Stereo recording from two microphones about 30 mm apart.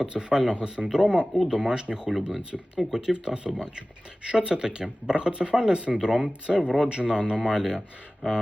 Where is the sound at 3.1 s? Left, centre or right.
Right.